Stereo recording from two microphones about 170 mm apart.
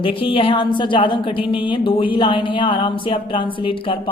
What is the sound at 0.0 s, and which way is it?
A woman's voice, 30° left (ahead or behind).